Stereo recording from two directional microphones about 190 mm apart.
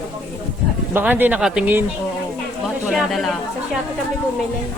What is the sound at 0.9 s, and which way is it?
Speech, 10° right (ahead or behind).